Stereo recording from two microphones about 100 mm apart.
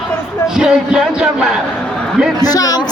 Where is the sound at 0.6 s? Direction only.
5° right (ahead or behind).